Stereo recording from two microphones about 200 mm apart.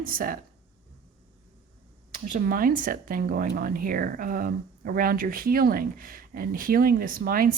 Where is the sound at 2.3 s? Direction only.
45° right (ahead or behind).